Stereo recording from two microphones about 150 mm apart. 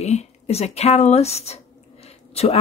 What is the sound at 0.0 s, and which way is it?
Speech, 50° left (ahead or behind).